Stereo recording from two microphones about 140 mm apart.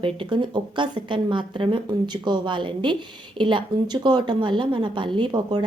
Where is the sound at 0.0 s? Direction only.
35° right (ahead or behind).